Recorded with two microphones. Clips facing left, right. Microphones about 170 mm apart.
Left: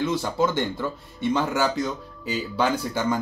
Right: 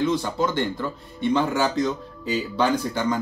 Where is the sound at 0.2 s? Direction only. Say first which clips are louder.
Even; 10° left (ahead or behind).